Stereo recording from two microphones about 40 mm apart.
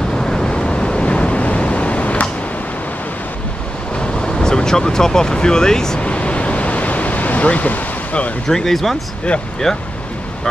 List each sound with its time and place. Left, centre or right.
0.1 s waves: centre; by 2.2 s left
3.9 s a sound: left
5.9 s waves: left
8.5 s speech: centre